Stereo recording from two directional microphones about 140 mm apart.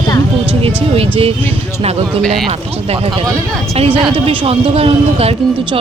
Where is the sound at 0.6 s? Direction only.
45° right (ahead or behind).